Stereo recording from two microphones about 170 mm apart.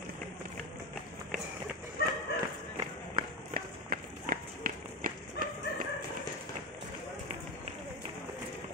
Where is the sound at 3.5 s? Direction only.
55° right (ahead or behind).